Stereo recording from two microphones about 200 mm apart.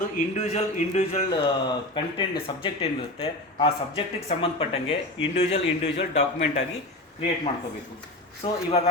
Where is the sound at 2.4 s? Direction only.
25° left (ahead or behind).